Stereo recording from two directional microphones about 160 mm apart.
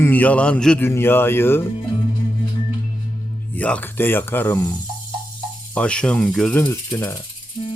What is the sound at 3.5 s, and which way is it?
Speech, 10° left (ahead or behind).